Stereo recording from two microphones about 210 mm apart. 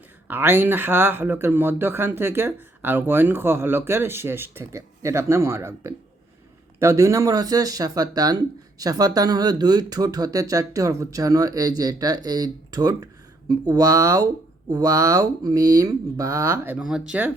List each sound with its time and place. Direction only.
0.3 s speech: 10° right (ahead or behind)